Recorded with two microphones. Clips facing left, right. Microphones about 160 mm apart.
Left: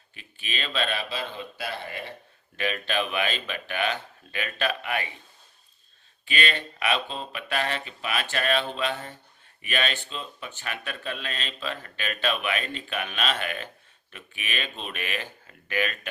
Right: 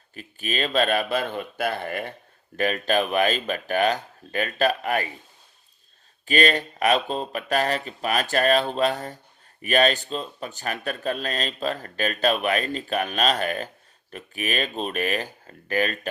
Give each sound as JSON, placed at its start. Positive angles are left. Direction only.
{"t": 0.1, "sound": "a man's voice", "side_deg": -40}
{"t": 6.2, "sound": "speech", "side_deg": -40}